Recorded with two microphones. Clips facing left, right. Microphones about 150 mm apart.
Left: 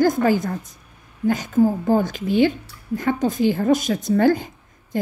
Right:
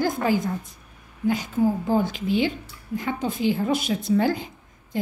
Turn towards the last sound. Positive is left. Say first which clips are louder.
# left 4 dB
turn(degrees=45)  # may be behind; listen again after turning